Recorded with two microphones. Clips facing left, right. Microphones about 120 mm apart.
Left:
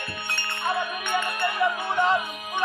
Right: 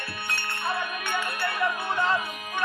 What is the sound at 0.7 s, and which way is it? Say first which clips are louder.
Music: left 4 dB; 15° left (ahead or behind).